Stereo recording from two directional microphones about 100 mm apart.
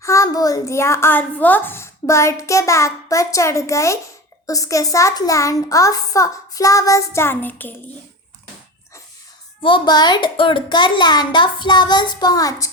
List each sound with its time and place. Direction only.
0.0 s a child's voice: 30° left (ahead or behind)
9.6 s a child's voice: 55° left (ahead or behind); by 12.7 s 35° left (ahead or behind)